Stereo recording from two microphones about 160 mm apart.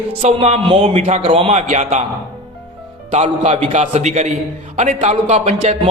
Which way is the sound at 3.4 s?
50° right (ahead or behind).